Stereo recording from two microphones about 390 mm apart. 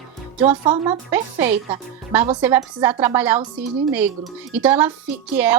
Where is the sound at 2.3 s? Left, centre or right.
Centre.